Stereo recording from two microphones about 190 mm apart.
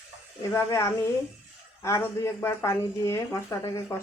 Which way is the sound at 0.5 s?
15° left (ahead or behind).